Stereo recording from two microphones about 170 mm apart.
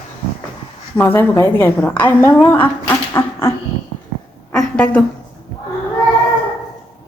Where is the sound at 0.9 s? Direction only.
15° left (ahead or behind).